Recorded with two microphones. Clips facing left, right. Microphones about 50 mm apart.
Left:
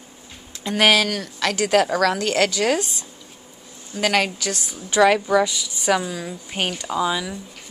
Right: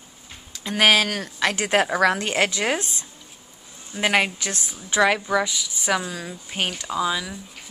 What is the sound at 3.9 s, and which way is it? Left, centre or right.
Speech, centre.